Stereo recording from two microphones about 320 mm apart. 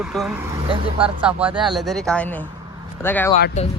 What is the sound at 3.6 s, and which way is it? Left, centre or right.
Speech, left.